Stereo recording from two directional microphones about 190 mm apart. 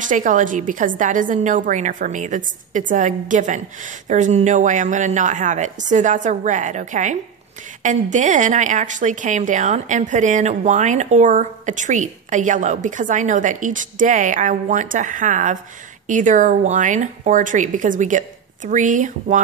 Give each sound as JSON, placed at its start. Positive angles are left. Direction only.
{"t": 0.0, "sound": "a woman's voice", "side_deg": -40}